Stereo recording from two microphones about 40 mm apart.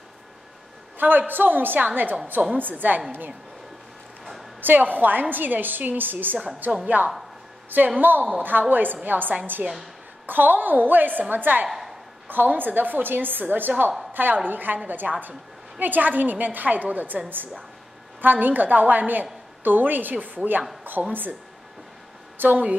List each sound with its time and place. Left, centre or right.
0.9 s a woman's voice: right
4.6 s a woman's voice: right
8.0 s a woman's voice: right
18.2 s a woman's voice: right
22.4 s a woman's voice: right